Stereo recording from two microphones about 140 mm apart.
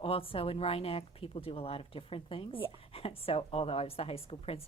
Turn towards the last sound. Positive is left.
turn(degrees=45)  # may be behind; listen again after turning